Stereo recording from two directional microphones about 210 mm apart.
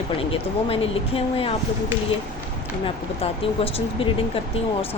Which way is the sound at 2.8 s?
25° left (ahead or behind).